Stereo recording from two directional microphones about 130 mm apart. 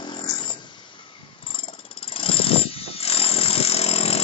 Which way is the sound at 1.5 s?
40° left (ahead or behind).